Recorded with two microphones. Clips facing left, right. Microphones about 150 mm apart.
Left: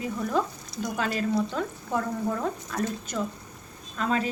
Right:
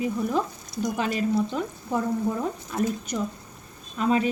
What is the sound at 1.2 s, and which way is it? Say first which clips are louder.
A woman's voice: right 1 dB; 10° right (ahead or behind).